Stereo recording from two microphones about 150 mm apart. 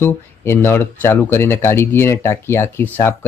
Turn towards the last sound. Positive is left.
turn(degrees=15)  # may be behind; listen again after turning